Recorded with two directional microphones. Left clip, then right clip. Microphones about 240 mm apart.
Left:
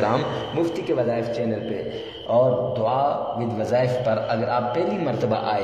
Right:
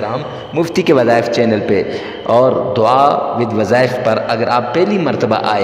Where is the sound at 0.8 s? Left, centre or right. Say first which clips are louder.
Right 17 dB; right.